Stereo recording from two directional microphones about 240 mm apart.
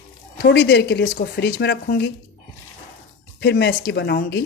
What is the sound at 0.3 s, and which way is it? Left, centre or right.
Speech, left.